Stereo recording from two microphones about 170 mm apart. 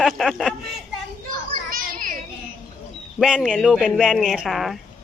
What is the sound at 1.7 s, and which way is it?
Children playing, 55° right (ahead or behind).